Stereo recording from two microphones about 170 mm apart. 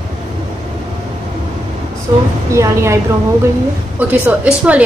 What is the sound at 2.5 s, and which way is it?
Speech, 15° right (ahead or behind).